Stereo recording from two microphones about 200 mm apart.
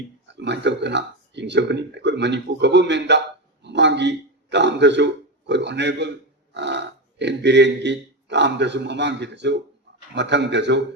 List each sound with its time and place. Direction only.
0.3 s a man's voice: 60° right (ahead or behind)